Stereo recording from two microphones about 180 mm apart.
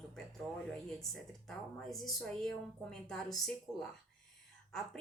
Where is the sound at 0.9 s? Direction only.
Centre (ahead or behind).